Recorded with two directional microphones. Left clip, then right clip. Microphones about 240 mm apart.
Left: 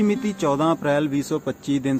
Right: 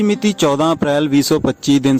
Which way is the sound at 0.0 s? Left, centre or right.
Right.